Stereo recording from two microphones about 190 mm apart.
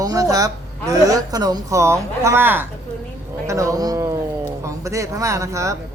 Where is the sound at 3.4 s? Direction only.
15° right (ahead or behind).